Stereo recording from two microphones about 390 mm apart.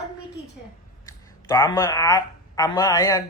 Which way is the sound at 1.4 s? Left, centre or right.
Centre.